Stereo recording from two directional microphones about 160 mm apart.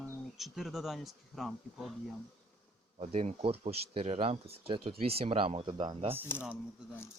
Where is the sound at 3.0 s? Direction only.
40° right (ahead or behind).